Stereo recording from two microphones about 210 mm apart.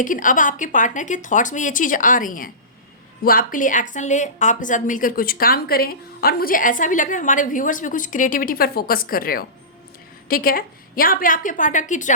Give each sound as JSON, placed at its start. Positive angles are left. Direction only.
{"t": 0.0, "sound": "a woman's voice", "side_deg": 40}